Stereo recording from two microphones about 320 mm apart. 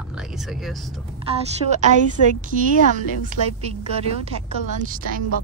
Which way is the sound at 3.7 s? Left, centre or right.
Centre.